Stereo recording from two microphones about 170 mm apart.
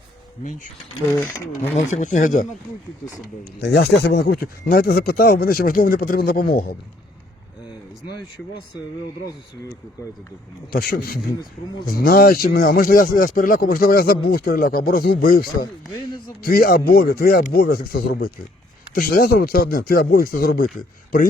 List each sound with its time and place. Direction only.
1.7 s speech: 45° left (ahead or behind)
3.6 s speech: 80° left; by 6.7 s 65° left (ahead or behind)
10.7 s speech: 65° left (ahead or behind)